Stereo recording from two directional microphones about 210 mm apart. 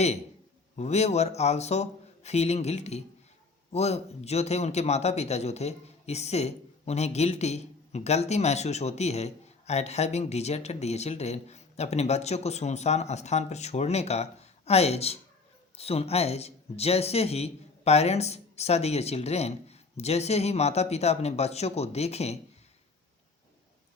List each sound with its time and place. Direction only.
0.8 s a man's voice: 30° left (ahead or behind)